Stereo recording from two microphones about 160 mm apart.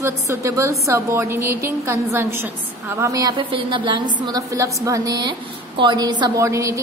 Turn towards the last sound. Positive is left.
turn(degrees=-20)  # may be behind; listen again after turning